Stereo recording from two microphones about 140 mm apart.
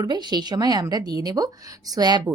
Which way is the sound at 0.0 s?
30° right (ahead or behind).